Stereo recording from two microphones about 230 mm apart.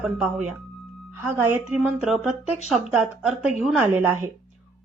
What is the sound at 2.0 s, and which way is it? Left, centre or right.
Speech, centre.